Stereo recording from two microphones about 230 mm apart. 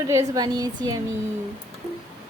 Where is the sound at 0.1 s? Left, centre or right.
Centre.